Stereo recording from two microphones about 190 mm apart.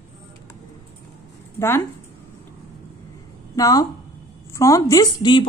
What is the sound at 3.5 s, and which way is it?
A woman's voice, 20° left (ahead or behind).